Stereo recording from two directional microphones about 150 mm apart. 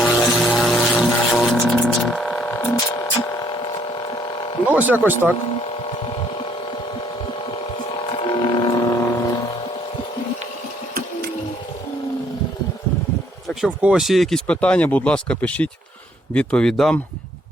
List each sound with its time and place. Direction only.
0.0 s music: centre (ahead or behind); by 4.6 s 30° left (ahead or behind)
4.9 s speech: 10° right (ahead or behind)
8.2 s a sound: 35° left (ahead or behind)
13.5 s speech: centre (ahead or behind)